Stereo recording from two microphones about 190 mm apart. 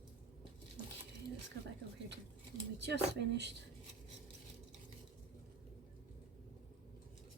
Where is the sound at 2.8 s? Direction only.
65° right (ahead or behind).